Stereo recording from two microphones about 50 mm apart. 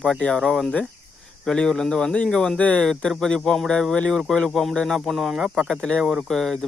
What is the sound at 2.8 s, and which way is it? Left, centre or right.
Speech, centre.